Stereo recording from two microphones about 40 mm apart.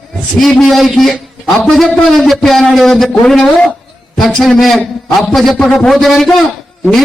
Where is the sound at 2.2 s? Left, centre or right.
Centre.